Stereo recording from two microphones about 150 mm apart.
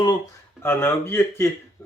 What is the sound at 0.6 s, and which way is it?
Speech, 15° left (ahead or behind).